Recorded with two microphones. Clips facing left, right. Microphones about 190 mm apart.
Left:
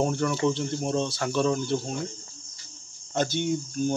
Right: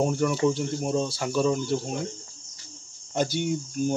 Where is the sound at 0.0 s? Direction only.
10° right (ahead or behind).